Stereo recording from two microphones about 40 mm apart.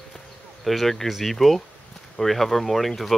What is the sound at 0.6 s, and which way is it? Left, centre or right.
Speech, centre.